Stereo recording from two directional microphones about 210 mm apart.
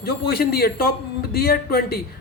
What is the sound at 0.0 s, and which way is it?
A man's voice, 50° left (ahead or behind).